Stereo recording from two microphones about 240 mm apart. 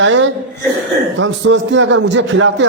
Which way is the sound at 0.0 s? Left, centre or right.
Right.